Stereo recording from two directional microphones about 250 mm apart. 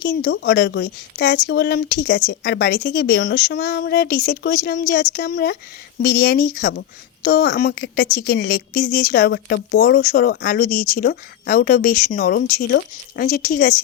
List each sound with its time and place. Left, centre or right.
0.0 s a woman's voice: left